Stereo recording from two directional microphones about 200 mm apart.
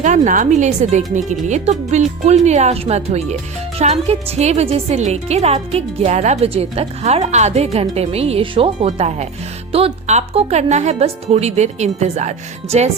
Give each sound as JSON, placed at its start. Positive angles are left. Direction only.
{"t": 0.0, "sound": "a woman's voice", "side_deg": -40}